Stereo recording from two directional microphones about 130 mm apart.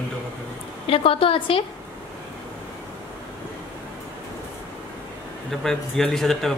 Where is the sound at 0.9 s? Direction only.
45° left (ahead or behind).